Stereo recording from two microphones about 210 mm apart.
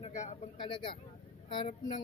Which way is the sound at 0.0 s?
35° left (ahead or behind).